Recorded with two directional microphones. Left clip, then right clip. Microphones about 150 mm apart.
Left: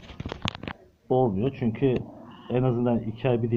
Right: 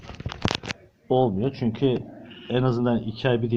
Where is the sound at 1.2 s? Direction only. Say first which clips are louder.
Right 1 dB; 25° right (ahead or behind).